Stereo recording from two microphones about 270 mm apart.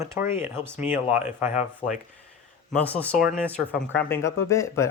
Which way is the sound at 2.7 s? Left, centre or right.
Centre.